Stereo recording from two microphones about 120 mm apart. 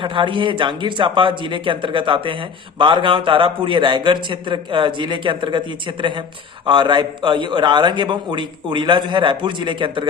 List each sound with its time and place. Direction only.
0.0 s a man's voice: 45° right (ahead or behind)